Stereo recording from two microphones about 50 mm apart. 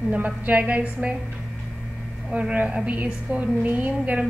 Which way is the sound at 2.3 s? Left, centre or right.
Right.